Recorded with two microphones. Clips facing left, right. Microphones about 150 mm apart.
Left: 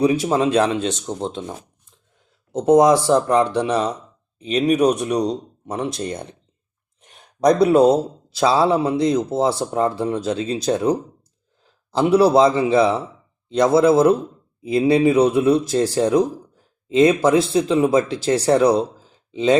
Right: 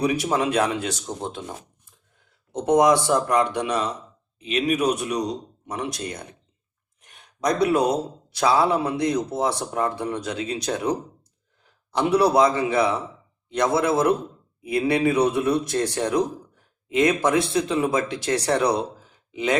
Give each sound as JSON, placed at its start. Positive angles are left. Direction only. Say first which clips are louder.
{"t": 0.0, "sound": "a man's voice", "louder": "left 5 dB", "side_deg": 25}
{"t": 7.0, "sound": "a sound", "louder": "left 4 dB", "side_deg": 30}
{"t": 7.6, "sound": "a man's voice", "louder": "left 6 dB", "side_deg": 30}